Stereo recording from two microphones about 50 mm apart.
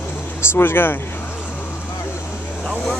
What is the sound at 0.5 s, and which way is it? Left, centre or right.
Speech, left.